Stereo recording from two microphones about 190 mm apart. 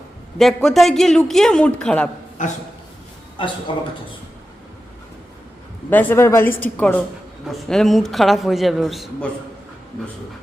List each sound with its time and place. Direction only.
0.3 s a man's voice: centre (ahead or behind)
2.4 s a sound: 40° left (ahead or behind)
3.4 s speech: 25° left (ahead or behind)
5.9 s a woman's voice: 10° left (ahead or behind)